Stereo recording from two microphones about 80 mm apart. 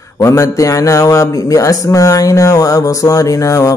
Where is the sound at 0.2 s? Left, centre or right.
Left.